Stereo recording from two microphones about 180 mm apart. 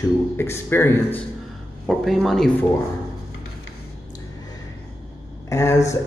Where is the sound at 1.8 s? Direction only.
Centre (ahead or behind).